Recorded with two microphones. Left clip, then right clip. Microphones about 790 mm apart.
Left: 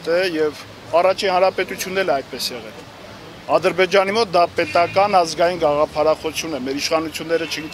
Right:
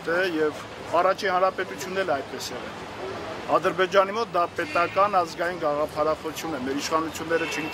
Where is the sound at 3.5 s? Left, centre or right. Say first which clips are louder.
Left 5 dB; left.